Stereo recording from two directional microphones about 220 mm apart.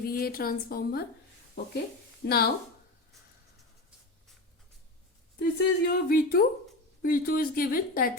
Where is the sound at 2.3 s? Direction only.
45° left (ahead or behind).